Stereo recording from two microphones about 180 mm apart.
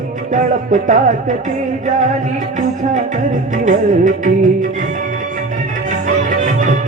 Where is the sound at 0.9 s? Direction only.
45° right (ahead or behind).